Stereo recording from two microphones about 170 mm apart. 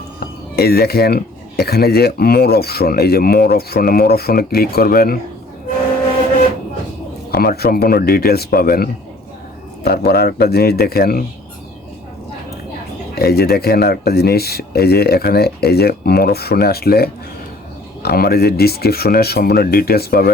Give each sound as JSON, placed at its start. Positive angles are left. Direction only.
{"t": 0.2, "sound": "speech", "side_deg": 70}
{"t": 7.3, "sound": "speech", "side_deg": 65}
{"t": 10.1, "sound": "speech", "side_deg": 65}
{"t": 13.1, "sound": "speech", "side_deg": 65}